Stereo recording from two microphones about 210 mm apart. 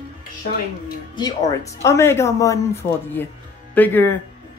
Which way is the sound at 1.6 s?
15° left (ahead or behind).